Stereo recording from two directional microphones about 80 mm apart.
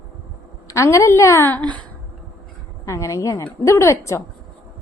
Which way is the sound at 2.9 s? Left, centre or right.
Left.